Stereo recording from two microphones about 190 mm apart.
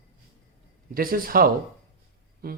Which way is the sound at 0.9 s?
50° right (ahead or behind).